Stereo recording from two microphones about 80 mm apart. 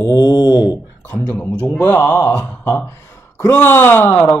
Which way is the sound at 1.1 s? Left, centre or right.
Left.